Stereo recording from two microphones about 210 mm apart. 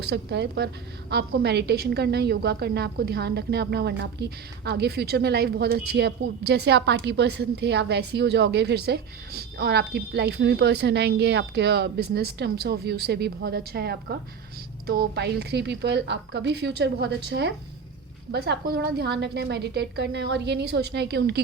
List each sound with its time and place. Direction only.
0.0 s a woman's voice: 55° right (ahead or behind)